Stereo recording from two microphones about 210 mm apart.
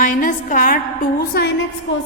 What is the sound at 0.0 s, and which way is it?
A woman's voice, 40° left (ahead or behind).